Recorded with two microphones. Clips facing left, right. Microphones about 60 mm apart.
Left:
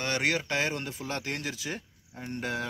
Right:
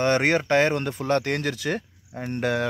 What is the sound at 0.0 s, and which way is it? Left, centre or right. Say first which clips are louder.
Speech: right 8 dB; right.